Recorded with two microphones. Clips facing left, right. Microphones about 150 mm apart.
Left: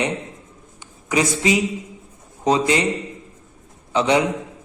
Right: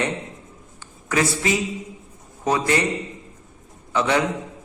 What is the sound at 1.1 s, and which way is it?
A man's voice, 15° left (ahead or behind).